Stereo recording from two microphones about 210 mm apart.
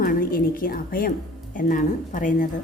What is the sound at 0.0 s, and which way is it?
A woman's voice, 45° left (ahead or behind).